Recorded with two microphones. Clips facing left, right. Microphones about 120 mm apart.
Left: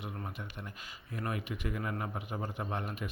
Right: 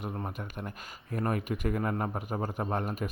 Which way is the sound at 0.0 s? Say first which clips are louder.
Right 5 dB; 40° right (ahead or behind).